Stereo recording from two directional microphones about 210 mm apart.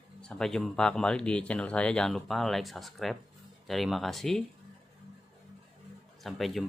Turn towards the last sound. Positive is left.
turn(degrees=0)  # may be behind; listen again after turning